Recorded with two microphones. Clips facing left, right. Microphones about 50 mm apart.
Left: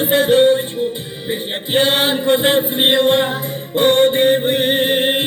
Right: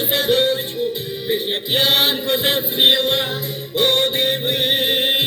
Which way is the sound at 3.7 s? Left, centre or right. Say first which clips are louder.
Left 6 dB; centre.